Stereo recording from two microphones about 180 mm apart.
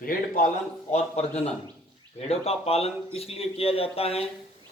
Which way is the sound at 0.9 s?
35° left (ahead or behind).